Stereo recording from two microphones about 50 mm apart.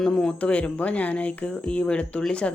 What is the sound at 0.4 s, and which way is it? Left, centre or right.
Speech, left.